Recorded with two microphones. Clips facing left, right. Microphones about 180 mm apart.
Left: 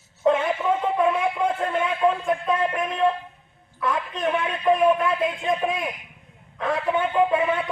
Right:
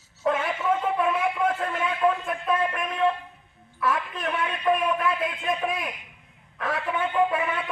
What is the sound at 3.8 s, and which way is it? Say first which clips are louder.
A man's voice: left 2 dB; 25° left (ahead or behind).